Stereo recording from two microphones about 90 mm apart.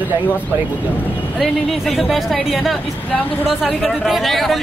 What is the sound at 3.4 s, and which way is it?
A man's voice, 5° right (ahead or behind).